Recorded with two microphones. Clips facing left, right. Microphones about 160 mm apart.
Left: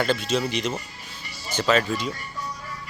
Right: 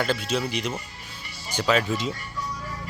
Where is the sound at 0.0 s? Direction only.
5° right (ahead or behind).